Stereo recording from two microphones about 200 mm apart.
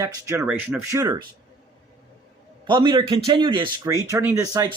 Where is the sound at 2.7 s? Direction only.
20° right (ahead or behind).